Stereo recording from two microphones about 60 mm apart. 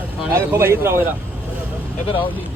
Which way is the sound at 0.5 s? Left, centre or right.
Right.